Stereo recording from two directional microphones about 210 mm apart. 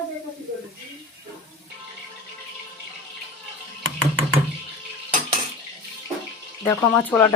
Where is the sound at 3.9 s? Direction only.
70° right (ahead or behind).